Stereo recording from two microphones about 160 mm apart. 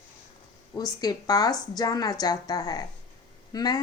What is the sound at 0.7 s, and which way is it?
A woman's voice, 25° left (ahead or behind).